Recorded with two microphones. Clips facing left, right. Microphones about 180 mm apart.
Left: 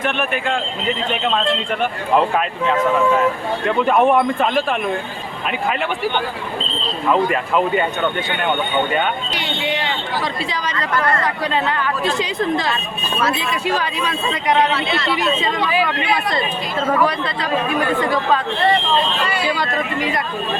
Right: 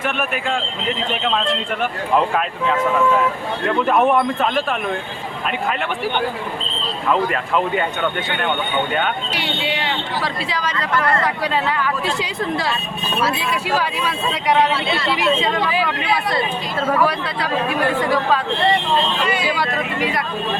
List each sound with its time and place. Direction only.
1.1 s a man's voice: centre (ahead or behind)
3.7 s a man's voice: centre (ahead or behind)
7.1 s a man's voice: centre (ahead or behind)
8.9 s speech: 5° right (ahead or behind)
11.7 s speech: 5° right (ahead or behind)
16.9 s speech: 10° right (ahead or behind)
19.2 s speech: 20° right (ahead or behind)
19.5 s a man's voice: 5° right (ahead or behind)